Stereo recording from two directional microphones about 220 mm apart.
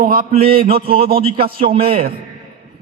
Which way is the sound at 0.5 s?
25° right (ahead or behind).